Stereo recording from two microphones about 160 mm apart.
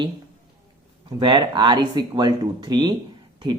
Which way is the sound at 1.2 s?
30° right (ahead or behind).